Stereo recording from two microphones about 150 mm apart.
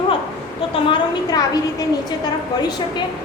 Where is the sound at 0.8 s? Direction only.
25° left (ahead or behind).